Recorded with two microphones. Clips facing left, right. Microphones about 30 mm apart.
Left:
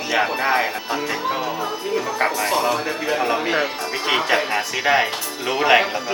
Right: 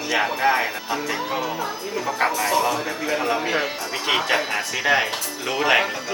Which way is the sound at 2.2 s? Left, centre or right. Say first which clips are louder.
Even; centre.